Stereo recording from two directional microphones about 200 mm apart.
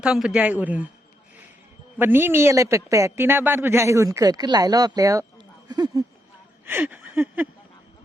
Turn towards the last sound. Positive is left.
turn(degrees=-10)  # may be behind; listen again after turning